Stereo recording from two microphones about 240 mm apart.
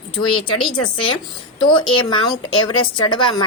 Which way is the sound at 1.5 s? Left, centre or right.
Centre.